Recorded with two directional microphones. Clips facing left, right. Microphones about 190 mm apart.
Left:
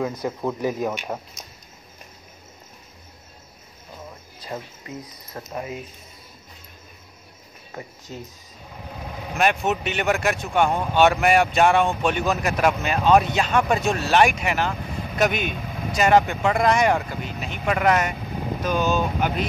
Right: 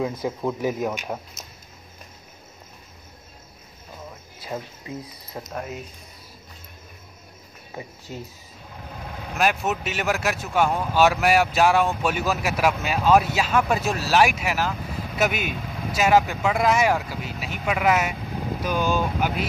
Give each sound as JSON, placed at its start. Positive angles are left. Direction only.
{"t": 0.0, "sound": "speech", "side_deg": 0}
{"t": 4.4, "sound": "a sound", "side_deg": -5}
{"t": 5.5, "sound": "speech", "side_deg": 5}
{"t": 8.1, "sound": "speech", "side_deg": -15}
{"t": 9.3, "sound": "speech", "side_deg": -5}